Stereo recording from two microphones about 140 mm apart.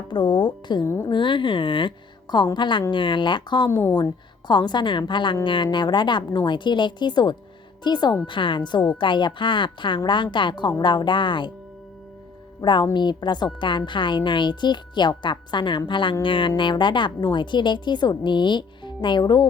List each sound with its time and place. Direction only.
0.1 s a woman's voice: 35° left (ahead or behind)
0.9 s a woman's voice: 20° left (ahead or behind)
1.1 s a woman's voice: 35° left (ahead or behind)
3.7 s a woman's voice: 20° left (ahead or behind)
12.6 s a woman's voice: 35° left (ahead or behind)